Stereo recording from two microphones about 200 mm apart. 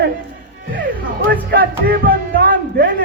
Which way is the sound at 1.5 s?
50° right (ahead or behind).